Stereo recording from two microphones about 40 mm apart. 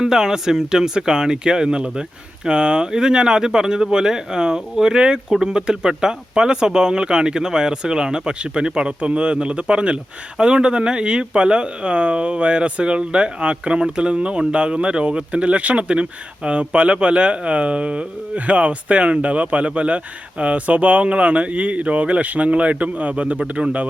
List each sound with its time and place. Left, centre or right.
0.0 s speech: centre